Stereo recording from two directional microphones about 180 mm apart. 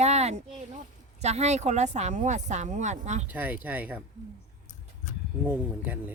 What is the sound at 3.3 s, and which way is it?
Speech, 10° right (ahead or behind).